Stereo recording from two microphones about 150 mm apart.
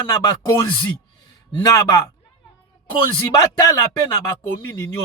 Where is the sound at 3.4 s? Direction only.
20° left (ahead or behind).